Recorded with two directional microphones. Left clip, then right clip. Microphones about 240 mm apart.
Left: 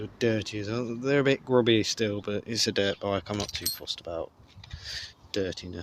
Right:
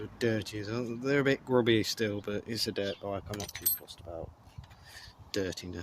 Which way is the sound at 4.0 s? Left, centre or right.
Left.